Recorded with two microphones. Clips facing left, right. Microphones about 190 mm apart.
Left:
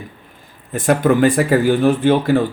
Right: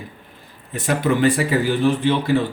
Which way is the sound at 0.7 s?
50° left (ahead or behind).